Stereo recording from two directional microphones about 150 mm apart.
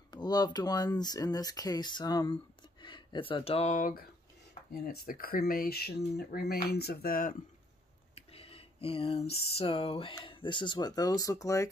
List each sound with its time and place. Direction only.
0.1 s speech: 25° left (ahead or behind)
3.7 s speech: 60° left (ahead or behind)
4.8 s speech: 75° left (ahead or behind)
8.1 s a sound: 40° left (ahead or behind); by 11.7 s 20° left (ahead or behind)